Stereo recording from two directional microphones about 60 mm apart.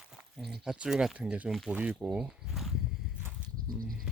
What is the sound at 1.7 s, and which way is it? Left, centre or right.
Speech, right.